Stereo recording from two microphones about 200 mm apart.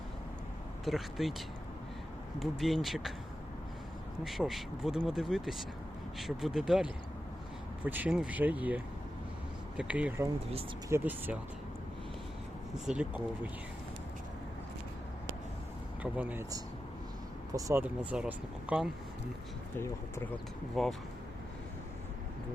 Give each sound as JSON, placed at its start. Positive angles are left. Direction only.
{"t": 0.9, "sound": "speech", "side_deg": 0}
{"t": 2.4, "sound": "speech", "side_deg": 0}
{"t": 4.2, "sound": "speech", "side_deg": 0}
{"t": 12.8, "sound": "speech", "side_deg": -5}
{"t": 16.1, "sound": "speech", "side_deg": -5}
{"t": 17.5, "sound": "speech", "side_deg": -15}
{"t": 19.7, "sound": "speech", "side_deg": 10}
{"t": 20.8, "sound": "speech", "side_deg": 0}